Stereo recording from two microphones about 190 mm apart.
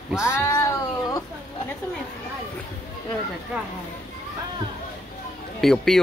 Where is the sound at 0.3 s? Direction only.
15° left (ahead or behind).